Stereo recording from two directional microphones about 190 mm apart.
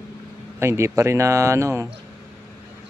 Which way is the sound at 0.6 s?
15° right (ahead or behind).